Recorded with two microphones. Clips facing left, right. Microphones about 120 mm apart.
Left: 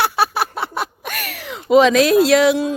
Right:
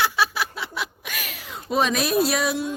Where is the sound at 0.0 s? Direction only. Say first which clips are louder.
Left 5 dB; 55° left (ahead or behind).